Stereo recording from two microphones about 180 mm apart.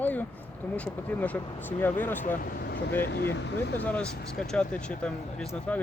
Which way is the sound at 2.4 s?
55° left (ahead or behind).